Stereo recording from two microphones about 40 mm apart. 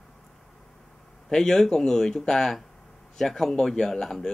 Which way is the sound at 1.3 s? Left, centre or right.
Centre.